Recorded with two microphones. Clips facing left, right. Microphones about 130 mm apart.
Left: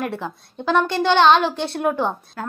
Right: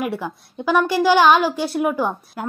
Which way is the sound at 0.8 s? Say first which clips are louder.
Right 1 dB; 5° right (ahead or behind).